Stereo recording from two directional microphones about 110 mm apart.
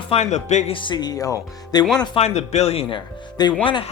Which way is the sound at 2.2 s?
85° left.